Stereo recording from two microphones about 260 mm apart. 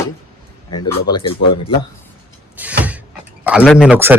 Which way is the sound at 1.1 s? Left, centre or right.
Centre.